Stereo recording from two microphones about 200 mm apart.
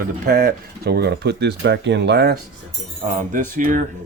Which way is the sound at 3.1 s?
40° right (ahead or behind).